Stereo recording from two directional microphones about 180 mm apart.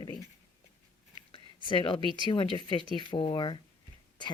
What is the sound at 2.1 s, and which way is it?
A woman's voice, 25° left (ahead or behind).